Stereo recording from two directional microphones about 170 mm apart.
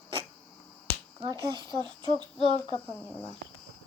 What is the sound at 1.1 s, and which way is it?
Speech, 25° right (ahead or behind).